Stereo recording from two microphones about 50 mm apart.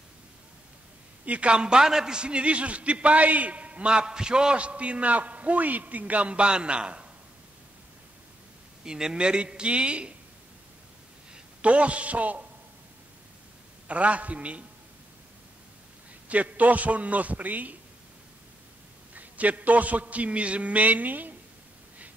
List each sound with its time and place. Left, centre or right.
1.2 s a man's voice: right
8.8 s a man's voice: centre
11.3 s a man's voice: right
13.8 s a man's voice: right
16.3 s a man's voice: right
19.1 s a man's voice: right